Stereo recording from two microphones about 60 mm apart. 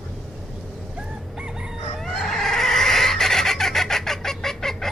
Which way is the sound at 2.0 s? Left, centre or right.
Centre.